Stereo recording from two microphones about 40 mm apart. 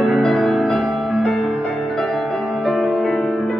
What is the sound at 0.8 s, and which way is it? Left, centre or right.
Music, right.